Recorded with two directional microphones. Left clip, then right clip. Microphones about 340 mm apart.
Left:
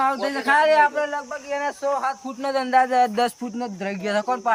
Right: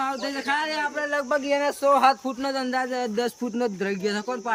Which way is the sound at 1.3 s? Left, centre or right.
Right.